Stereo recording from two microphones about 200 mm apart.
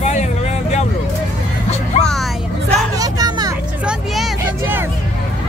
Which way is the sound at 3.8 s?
5° right (ahead or behind).